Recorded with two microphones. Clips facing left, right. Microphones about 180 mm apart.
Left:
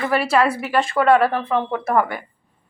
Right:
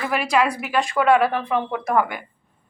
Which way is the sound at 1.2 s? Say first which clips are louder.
Left 2 dB; 15° right (ahead or behind).